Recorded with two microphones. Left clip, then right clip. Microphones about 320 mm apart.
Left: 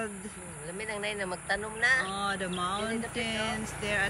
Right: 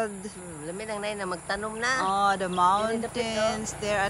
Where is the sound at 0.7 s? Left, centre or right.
Centre.